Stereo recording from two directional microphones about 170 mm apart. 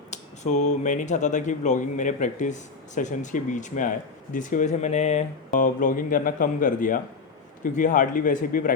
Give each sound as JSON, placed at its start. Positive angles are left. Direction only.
{"t": 0.1, "sound": "speech", "side_deg": 45}